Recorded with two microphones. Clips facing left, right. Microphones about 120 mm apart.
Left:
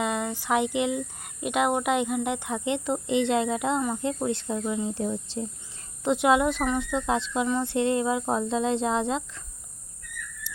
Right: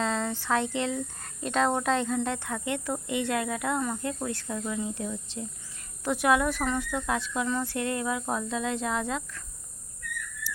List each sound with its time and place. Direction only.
0.0 s speech: 15° left (ahead or behind); by 5.5 s 35° left (ahead or behind)
6.1 s speech: 20° left (ahead or behind)